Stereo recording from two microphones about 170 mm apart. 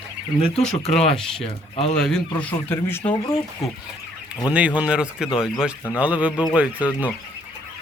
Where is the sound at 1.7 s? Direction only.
40° left (ahead or behind).